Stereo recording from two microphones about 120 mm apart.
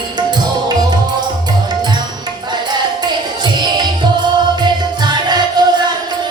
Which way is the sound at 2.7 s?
35° right (ahead or behind).